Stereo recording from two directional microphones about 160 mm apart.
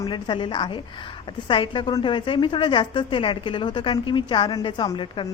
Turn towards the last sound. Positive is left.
turn(degrees=30)  # may be behind; listen again after turning